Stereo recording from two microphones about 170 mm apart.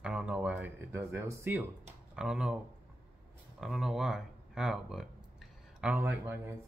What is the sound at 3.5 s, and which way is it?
Speech, centre (ahead or behind).